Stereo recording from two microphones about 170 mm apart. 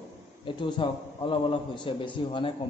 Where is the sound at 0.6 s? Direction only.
30° left (ahead or behind).